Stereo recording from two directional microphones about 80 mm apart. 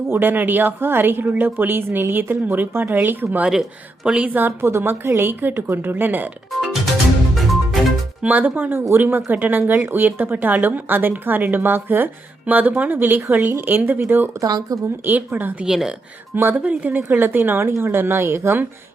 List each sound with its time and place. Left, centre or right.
0.1 s speech: right
3.4 s speech: centre
4.3 s speech: right
7.3 s music: centre
8.2 s speech: right
14.4 s speech: right
15.0 s speech: right
15.6 s speech: centre
16.3 s speech: right